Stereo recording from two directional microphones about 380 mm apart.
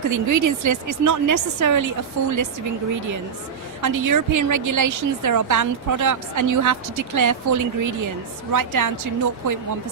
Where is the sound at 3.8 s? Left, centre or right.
Right.